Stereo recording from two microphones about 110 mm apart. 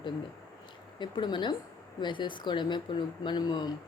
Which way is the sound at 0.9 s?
45° left (ahead or behind).